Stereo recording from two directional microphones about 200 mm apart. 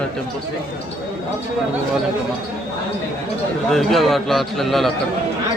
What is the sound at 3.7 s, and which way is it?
A man's voice, centre (ahead or behind).